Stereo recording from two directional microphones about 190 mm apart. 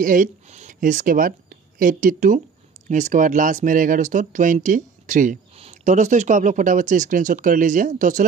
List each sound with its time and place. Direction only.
0.0 s speech: 45° right (ahead or behind)